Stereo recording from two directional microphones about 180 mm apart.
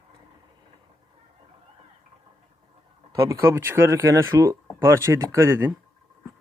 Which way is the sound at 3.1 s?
15° right (ahead or behind).